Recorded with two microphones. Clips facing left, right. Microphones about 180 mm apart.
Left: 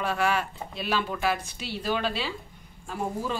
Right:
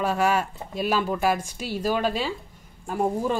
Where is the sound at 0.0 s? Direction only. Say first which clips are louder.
Right 4 dB; 40° right (ahead or behind).